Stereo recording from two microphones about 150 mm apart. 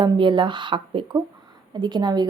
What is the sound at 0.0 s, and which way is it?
Speech, 30° right (ahead or behind).